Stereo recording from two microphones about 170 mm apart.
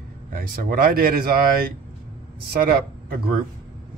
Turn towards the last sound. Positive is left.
turn(degrees=-65)  # may be behind; listen again after turning